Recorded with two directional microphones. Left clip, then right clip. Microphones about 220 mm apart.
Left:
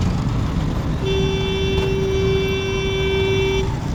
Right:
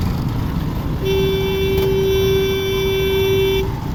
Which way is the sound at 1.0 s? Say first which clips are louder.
Right 4 dB; 55° right (ahead or behind).